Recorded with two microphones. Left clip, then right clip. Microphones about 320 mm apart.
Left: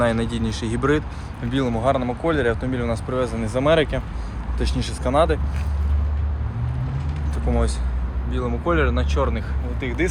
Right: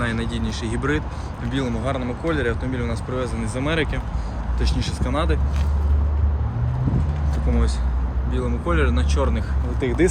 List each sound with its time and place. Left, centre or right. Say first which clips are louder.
0.0 s speech: left 5 dB; centre
8.3 s speech: left 2 dB; centre
9.8 s speech: right 4 dB; centre